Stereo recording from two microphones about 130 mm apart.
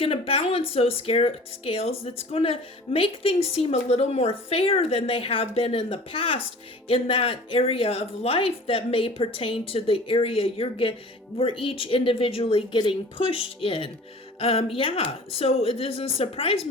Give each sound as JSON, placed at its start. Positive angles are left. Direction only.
{"t": 0.0, "sound": "speech", "side_deg": 45}